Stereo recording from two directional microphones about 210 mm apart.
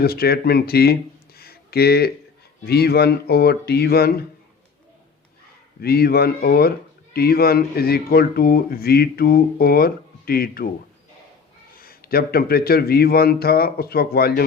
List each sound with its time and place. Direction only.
0.0 s speech: 45° left (ahead or behind)
1.4 s a sound: 45° left (ahead or behind)
2.6 s speech: 50° left (ahead or behind)
5.8 s speech: 45° left (ahead or behind)
11.8 s speech: 45° left (ahead or behind)